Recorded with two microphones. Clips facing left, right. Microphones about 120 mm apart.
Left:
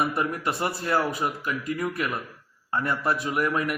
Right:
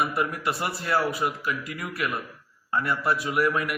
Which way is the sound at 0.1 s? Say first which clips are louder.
Even; 30° left (ahead or behind).